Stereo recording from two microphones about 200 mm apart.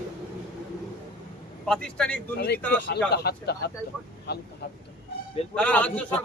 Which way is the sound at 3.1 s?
55° left (ahead or behind).